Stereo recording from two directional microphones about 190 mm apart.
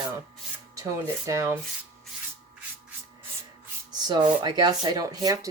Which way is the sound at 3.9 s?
20° right (ahead or behind).